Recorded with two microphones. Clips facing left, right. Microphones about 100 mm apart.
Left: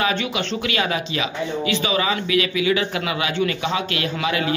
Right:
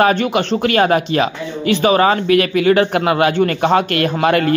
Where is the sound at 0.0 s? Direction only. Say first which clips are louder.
Right 8 dB; 50° right (ahead or behind).